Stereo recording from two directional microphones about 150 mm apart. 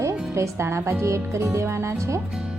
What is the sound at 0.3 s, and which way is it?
Speech, 20° right (ahead or behind).